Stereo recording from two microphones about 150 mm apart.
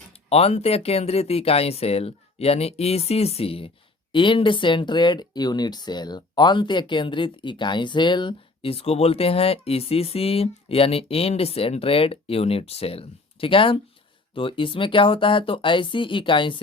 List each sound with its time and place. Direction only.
0.3 s speech: 40° left (ahead or behind)